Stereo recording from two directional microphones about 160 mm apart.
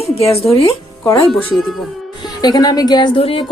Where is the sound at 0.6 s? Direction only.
20° left (ahead or behind).